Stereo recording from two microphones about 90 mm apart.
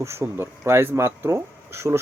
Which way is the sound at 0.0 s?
25° right (ahead or behind).